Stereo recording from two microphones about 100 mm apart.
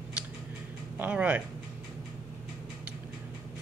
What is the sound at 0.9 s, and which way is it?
Speech, 15° right (ahead or behind).